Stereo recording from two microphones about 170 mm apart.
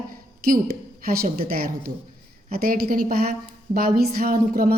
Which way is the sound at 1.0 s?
60° right (ahead or behind).